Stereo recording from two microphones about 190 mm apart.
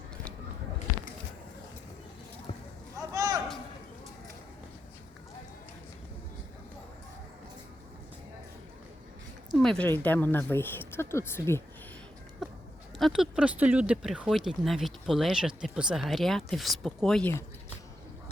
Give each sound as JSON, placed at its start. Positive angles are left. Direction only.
{"t": 3.1, "sound": "a sound", "side_deg": -20}
{"t": 9.6, "sound": "speech", "side_deg": 5}
{"t": 13.0, "sound": "speech", "side_deg": 0}